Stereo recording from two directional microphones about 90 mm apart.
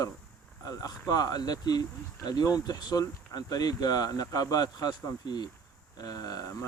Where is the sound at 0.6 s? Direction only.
45° left (ahead or behind).